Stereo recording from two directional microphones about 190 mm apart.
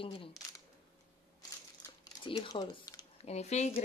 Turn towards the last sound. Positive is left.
turn(degrees=35)  # may be behind; listen again after turning